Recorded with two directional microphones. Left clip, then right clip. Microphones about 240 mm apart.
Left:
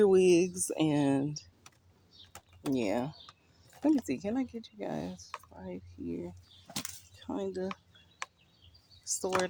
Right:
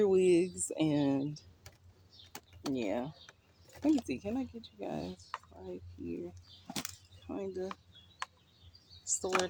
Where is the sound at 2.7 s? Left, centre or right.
Left.